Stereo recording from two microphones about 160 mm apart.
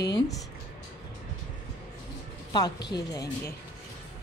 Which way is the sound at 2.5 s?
25° left (ahead or behind).